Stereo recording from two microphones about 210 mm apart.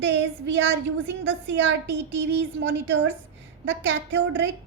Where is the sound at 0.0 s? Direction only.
60° right (ahead or behind).